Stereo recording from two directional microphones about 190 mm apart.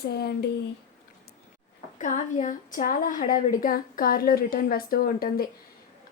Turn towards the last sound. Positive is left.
turn(degrees=50)  # may be behind; listen again after turning